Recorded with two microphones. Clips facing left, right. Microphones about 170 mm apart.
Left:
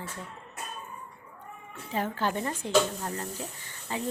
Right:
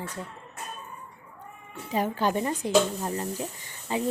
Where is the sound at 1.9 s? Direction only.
15° right (ahead or behind).